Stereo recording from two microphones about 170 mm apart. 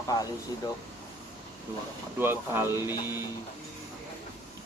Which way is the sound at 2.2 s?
15° right (ahead or behind).